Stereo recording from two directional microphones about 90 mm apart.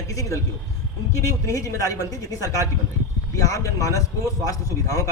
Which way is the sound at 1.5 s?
35° left (ahead or behind).